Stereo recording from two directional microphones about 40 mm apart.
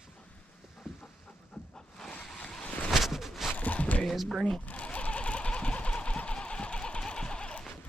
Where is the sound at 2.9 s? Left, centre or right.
Centre.